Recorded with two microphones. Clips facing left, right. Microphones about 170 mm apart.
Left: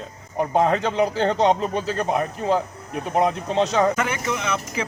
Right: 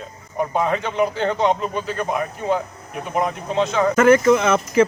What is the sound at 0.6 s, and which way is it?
Speech, 35° left (ahead or behind).